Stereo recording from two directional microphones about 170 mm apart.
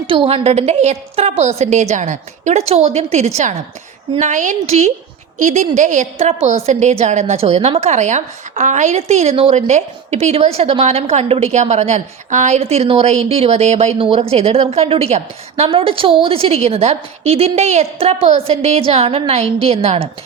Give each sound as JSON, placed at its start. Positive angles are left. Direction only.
{"t": 0.1, "sound": "a woman's voice", "side_deg": -30}